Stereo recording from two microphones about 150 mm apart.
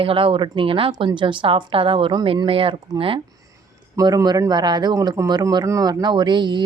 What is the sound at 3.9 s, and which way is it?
Speech, 25° right (ahead or behind).